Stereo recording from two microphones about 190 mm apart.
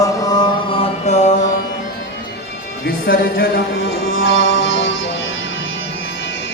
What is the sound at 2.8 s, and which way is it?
Speech, 55° left (ahead or behind).